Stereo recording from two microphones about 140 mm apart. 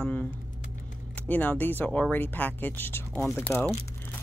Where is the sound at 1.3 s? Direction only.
10° left (ahead or behind).